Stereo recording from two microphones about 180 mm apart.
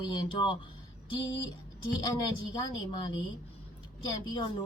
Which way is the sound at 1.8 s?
20° left (ahead or behind).